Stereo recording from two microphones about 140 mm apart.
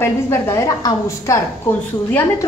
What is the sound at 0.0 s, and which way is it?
A woman's voice, 20° left (ahead or behind).